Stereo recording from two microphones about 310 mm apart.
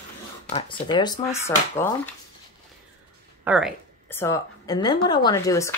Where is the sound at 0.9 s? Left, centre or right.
Centre.